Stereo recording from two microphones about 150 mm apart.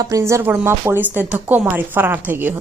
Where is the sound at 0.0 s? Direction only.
20° right (ahead or behind).